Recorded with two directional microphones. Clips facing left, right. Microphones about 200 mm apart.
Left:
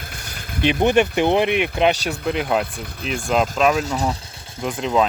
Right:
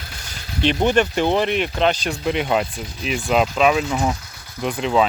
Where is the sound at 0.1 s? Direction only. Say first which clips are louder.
Left 1 dB; 55° left (ahead or behind).